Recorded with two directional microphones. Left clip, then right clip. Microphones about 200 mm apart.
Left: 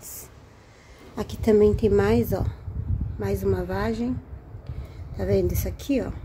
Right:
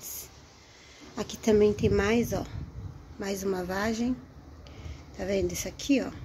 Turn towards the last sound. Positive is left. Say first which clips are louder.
# left 1 dB
turn(degrees=10)  # may be behind; listen again after turning